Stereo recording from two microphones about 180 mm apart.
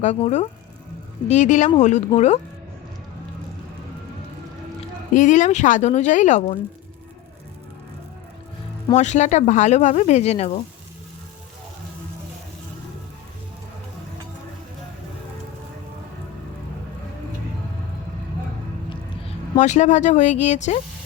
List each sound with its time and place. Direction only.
0.0 s speech: 40° left (ahead or behind)
5.1 s speech: 45° left (ahead or behind)
9.0 s speech: 40° left (ahead or behind)
19.5 s speech: 40° left (ahead or behind)